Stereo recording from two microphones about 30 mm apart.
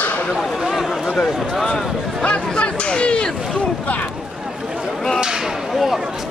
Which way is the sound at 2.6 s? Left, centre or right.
Left.